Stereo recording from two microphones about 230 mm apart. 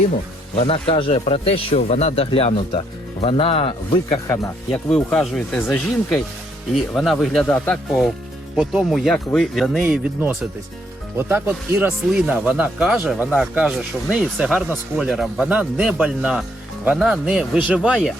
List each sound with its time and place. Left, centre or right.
0.5 s speech: left
4.9 s speech: centre